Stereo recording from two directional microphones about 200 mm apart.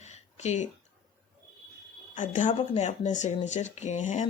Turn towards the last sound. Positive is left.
turn(degrees=35)  # may be behind; listen again after turning